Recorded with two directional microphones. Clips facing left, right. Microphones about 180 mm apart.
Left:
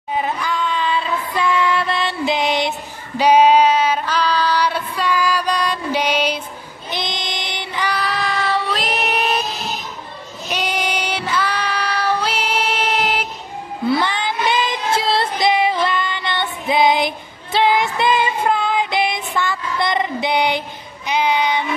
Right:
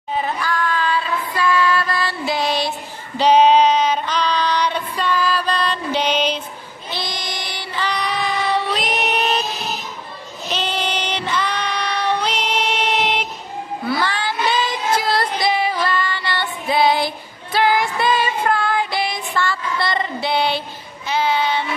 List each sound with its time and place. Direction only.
0.1 s child singing: 15° left (ahead or behind)
3.2 s music: 10° left (ahead or behind)
6.9 s child singing: 20° left (ahead or behind)
7.9 s child singing: centre (ahead or behind)
10.5 s child singing: 10° left (ahead or behind)
13.8 s child singing: 20° left (ahead or behind)